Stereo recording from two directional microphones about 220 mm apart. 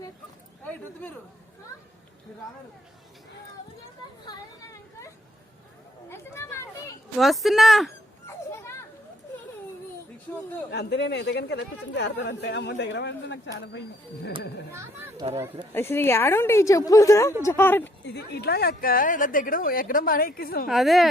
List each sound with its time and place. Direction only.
0.6 s a sound: 5° left (ahead or behind)
6.1 s a woman's voice: 10° left (ahead or behind)
7.2 s speech: centre (ahead or behind)
8.3 s children playing: 10° left (ahead or behind)
10.7 s speech: 50° left (ahead or behind)
14.7 s speech: 10° right (ahead or behind)
15.7 s a woman's voice: 10° left (ahead or behind)
18.0 s speech: 50° left (ahead or behind)
20.7 s speech: centre (ahead or behind)